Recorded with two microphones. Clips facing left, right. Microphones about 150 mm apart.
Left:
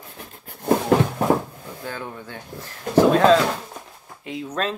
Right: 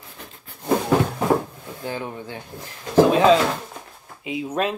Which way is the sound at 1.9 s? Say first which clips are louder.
Right 4 dB; 20° right (ahead or behind).